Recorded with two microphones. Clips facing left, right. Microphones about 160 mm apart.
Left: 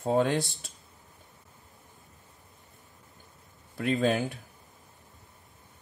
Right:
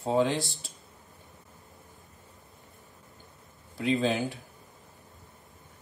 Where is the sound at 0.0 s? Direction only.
50° left (ahead or behind).